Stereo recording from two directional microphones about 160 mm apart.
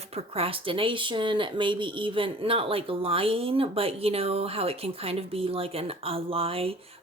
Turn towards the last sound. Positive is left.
turn(degrees=-35)  # may be behind; listen again after turning